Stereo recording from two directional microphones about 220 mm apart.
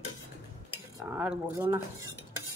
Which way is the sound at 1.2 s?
5° right (ahead or behind).